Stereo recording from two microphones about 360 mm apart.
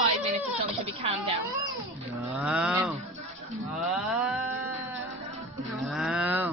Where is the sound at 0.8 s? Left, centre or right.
Centre.